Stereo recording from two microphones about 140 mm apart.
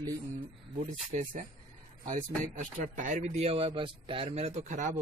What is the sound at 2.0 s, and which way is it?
A man's voice, 65° right (ahead or behind).